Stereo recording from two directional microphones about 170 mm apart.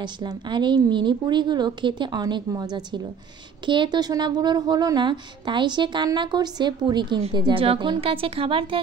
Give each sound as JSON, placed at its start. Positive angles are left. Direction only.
{"t": 0.0, "sound": "a woman's voice", "side_deg": -25}